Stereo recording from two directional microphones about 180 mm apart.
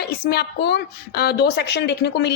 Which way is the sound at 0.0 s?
65° left (ahead or behind).